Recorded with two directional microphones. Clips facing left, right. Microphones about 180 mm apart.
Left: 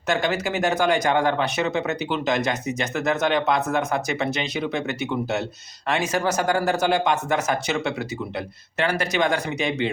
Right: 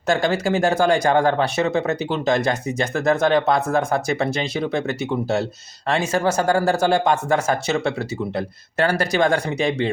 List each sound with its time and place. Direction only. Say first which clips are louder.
0.1 s speech: right 4 dB; 30° right (ahead or behind)